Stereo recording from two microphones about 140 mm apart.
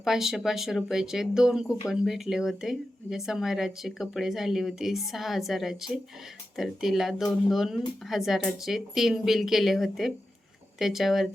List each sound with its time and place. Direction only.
0.0 s speech: 5° right (ahead or behind)